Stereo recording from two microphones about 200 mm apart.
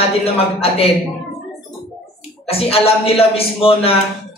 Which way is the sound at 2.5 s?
30° left (ahead or behind).